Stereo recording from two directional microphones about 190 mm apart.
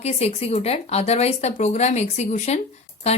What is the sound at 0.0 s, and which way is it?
Speech, 30° left (ahead or behind).